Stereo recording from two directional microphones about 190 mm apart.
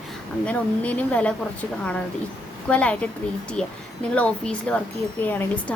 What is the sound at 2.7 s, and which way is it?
Speech, 5° left (ahead or behind).